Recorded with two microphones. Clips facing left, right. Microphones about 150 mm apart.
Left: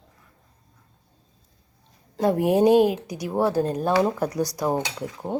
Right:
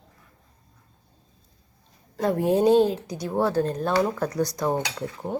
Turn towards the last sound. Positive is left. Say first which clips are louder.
# even
turn(degrees=10)  # may be behind; listen again after turning